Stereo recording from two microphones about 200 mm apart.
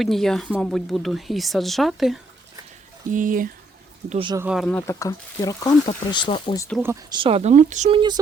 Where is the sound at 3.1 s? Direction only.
40° right (ahead or behind).